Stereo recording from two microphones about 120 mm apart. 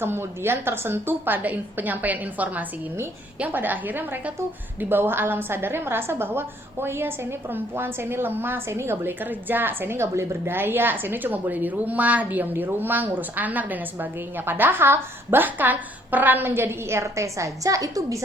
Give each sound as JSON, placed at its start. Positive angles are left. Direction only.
{"t": 0.0, "sound": "a woman's voice", "side_deg": -20}